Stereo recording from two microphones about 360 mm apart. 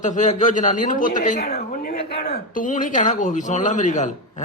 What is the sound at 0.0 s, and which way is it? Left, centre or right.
Speech, left.